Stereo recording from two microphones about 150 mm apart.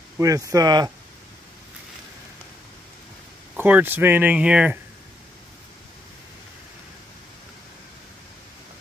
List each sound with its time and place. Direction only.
0.2 s speech: 20° right (ahead or behind)
3.6 s speech: 10° right (ahead or behind)